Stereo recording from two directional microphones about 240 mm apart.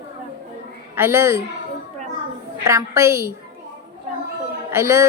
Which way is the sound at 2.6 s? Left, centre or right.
Centre.